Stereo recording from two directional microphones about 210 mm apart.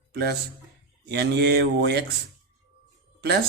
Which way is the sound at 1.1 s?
55° right (ahead or behind).